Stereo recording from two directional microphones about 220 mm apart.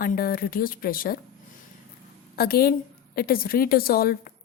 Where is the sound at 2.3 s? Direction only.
45° left (ahead or behind).